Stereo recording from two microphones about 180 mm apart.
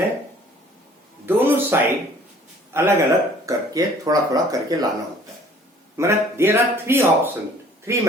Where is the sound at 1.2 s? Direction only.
10° right (ahead or behind).